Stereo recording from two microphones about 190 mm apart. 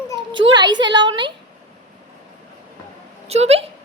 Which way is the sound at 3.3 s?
35° right (ahead or behind).